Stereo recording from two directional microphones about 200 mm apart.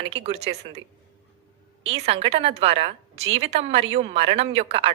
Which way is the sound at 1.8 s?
30° right (ahead or behind).